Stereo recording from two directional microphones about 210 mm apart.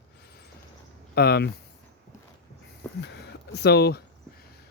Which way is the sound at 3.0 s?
50° left (ahead or behind).